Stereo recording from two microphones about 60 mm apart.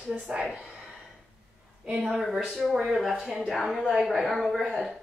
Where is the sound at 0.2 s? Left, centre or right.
Centre.